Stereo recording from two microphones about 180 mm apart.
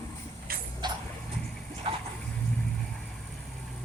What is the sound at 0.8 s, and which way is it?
Music, 25° right (ahead or behind).